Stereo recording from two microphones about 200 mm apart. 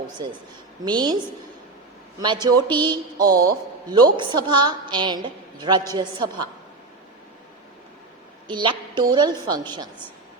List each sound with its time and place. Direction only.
0.9 s a woman's voice: 20° right (ahead or behind)
2.2 s a woman's voice: 20° right (ahead or behind)
8.5 s a woman's voice: 25° right (ahead or behind)